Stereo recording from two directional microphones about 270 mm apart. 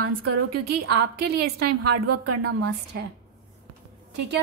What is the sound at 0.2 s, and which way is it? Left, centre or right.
Speech, right.